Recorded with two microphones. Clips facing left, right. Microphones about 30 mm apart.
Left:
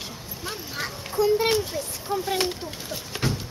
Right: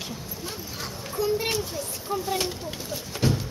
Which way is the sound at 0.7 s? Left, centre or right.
Left.